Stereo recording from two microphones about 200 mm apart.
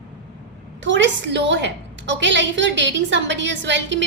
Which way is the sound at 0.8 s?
65° right (ahead or behind).